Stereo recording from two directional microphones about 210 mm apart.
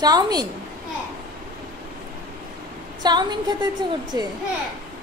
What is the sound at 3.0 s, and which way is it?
A woman's voice, 20° right (ahead or behind).